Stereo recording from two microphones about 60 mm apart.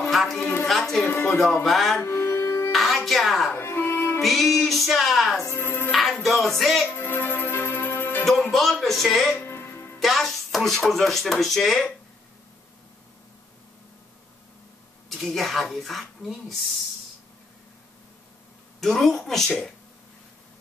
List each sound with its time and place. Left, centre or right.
0.0 s music: centre
1.3 s speech: centre
2.0 s music: left
2.7 s music: centre
3.5 s music: left
4.2 s speech: centre
5.4 s speech: left
5.9 s speech: centre
7.0 s music: left
8.3 s music: centre
9.4 s music: left
9.9 s speech: centre
15.0 s speech: centre
18.8 s speech: centre